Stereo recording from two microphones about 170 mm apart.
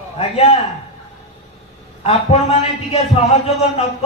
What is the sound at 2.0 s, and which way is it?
A man's voice, 35° left (ahead or behind).